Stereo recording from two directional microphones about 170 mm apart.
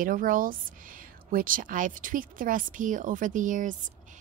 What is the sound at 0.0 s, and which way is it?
A woman's voice, 55° right (ahead or behind).